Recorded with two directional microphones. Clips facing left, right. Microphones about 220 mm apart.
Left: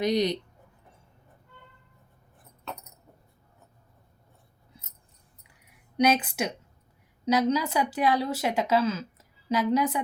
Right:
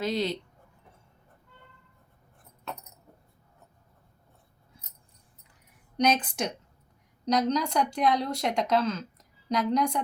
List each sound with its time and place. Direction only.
0.0 s speech: 15° left (ahead or behind)
6.0 s speech: 5° left (ahead or behind)